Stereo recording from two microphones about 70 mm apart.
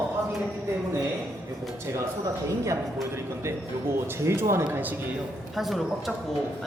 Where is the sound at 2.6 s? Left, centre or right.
Right.